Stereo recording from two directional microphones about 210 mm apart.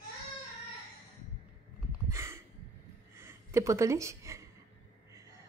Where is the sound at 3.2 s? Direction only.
15° right (ahead or behind).